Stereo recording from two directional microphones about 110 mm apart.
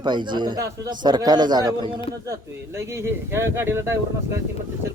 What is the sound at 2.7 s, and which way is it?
Speech, 25° right (ahead or behind).